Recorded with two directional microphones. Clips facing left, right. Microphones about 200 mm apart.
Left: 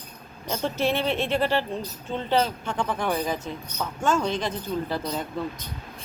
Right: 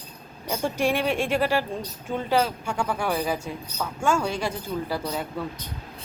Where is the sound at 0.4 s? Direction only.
10° right (ahead or behind).